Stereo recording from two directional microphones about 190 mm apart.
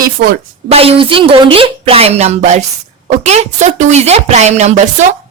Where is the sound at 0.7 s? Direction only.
30° right (ahead or behind).